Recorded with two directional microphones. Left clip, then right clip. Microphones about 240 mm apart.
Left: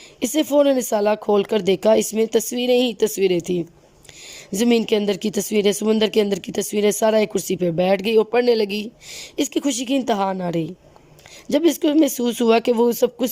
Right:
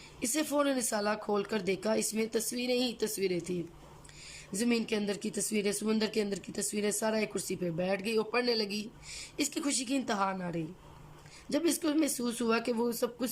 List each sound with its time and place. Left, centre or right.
0.2 s speech: left